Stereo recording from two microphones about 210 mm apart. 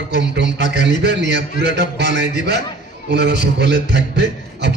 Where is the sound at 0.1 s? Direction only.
55° right (ahead or behind).